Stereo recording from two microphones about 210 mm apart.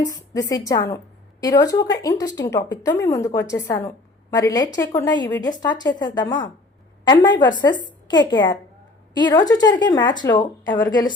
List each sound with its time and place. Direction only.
0.0 s a woman's voice: 15° left (ahead or behind)